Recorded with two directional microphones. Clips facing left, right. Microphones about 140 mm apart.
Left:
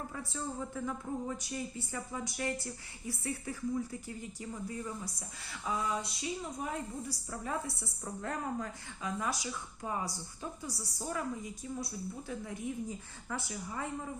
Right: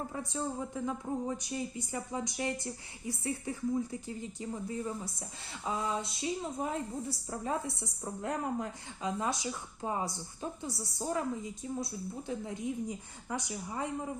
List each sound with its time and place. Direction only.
0.1 s a woman's voice: 20° right (ahead or behind)